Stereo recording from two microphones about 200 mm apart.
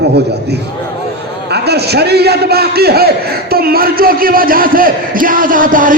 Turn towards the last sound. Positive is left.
turn(degrees=-40)  # may be behind; listen again after turning